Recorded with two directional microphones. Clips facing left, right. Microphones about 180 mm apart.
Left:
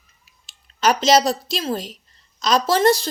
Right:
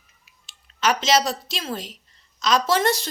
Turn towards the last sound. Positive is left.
turn(degrees=35)  # may be behind; listen again after turning